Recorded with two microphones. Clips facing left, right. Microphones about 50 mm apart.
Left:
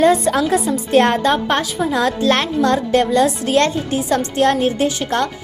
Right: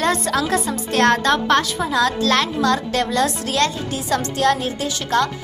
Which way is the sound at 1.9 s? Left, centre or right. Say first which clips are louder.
Left 2 dB; left.